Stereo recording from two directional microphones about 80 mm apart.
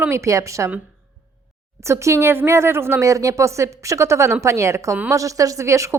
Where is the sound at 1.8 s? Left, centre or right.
Right.